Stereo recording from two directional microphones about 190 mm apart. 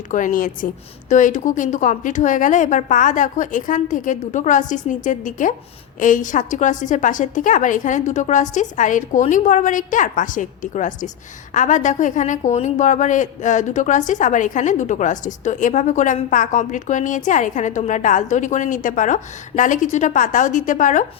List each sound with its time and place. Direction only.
0.1 s a woman's voice: 45° left (ahead or behind)